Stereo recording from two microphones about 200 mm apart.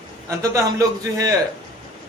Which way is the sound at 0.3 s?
15° right (ahead or behind).